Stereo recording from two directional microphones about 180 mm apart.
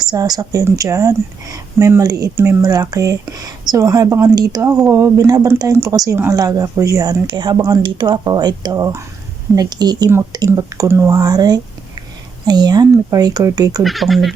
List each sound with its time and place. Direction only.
0.0 s speech: 20° right (ahead or behind)
13.8 s speech: centre (ahead or behind)